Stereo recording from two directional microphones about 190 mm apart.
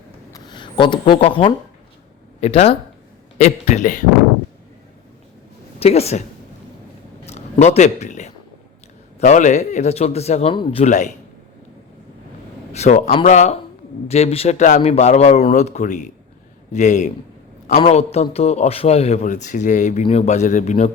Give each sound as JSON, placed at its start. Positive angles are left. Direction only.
{"t": 0.3, "sound": "speech", "side_deg": 25}
{"t": 5.8, "sound": "speech", "side_deg": 35}
{"t": 7.3, "sound": "a man's voice", "side_deg": 35}
{"t": 12.7, "sound": "speech", "side_deg": 35}